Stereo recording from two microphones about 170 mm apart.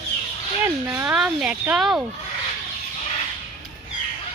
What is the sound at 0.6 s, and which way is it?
Speech, 15° right (ahead or behind).